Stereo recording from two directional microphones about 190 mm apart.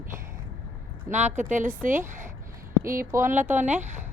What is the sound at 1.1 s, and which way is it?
Speech, 40° right (ahead or behind).